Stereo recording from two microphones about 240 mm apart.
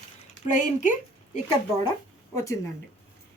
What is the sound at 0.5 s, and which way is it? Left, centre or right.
Speech, left.